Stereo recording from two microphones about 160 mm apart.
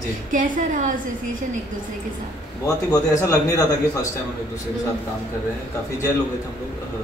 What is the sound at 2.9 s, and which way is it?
A man's voice, 20° left (ahead or behind).